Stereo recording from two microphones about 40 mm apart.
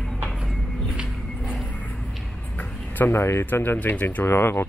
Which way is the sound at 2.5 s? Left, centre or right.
Left.